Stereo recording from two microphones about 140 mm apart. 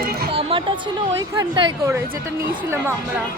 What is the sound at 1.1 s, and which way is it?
Speech, 30° right (ahead or behind).